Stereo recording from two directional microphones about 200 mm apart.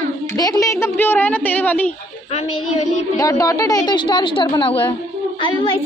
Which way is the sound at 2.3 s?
30° left (ahead or behind).